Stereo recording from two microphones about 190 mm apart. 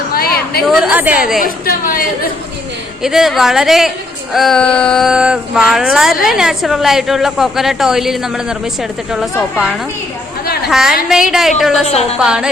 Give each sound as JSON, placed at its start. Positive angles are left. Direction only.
{"t": 0.1, "sound": "chatter", "side_deg": 55}
{"t": 0.6, "sound": "a woman's voice", "side_deg": -5}
{"t": 1.4, "sound": "a woman's voice", "side_deg": 50}
{"t": 3.0, "sound": "a woman's voice", "side_deg": 0}
{"t": 10.7, "sound": "a woman's voice", "side_deg": 0}